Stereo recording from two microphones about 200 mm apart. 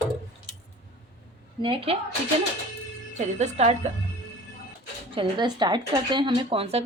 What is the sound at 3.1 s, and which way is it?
Speech, 35° right (ahead or behind).